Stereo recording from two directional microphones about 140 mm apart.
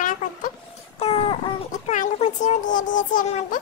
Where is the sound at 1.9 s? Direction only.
60° left (ahead or behind).